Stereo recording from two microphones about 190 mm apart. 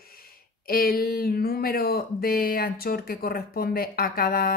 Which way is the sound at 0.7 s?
50° left (ahead or behind).